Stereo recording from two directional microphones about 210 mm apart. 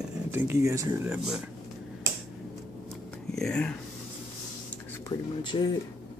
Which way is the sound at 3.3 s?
5° left (ahead or behind).